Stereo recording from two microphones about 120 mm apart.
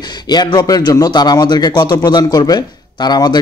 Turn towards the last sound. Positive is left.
turn(degrees=35)  # may be behind; listen again after turning